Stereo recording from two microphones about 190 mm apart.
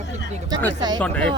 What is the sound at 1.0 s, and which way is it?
Speech, 5° left (ahead or behind).